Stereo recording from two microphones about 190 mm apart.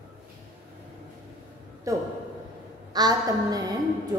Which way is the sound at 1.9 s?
15° right (ahead or behind).